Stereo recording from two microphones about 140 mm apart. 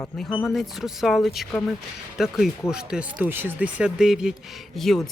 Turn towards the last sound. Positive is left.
turn(degrees=0)  # may be behind; listen again after turning